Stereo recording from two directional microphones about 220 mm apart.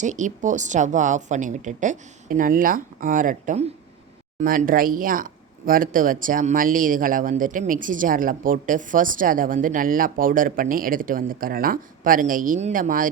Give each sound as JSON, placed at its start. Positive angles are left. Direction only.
{"t": 0.0, "sound": "speech", "side_deg": -35}